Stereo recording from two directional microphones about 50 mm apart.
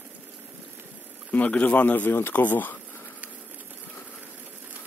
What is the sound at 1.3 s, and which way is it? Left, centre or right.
Speech, left.